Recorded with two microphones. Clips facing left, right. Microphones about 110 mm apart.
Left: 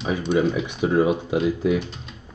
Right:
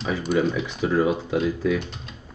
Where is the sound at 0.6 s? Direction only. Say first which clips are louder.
Left 2 dB; 20° left (ahead or behind).